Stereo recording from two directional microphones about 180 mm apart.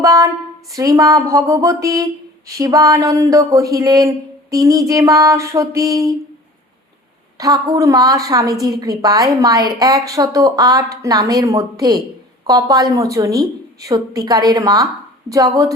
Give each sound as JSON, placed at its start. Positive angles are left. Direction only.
{"t": 0.0, "sound": "a sound", "side_deg": -20}
{"t": 0.7, "sound": "a woman's voice", "side_deg": -20}
{"t": 7.3, "sound": "a woman's voice", "side_deg": -20}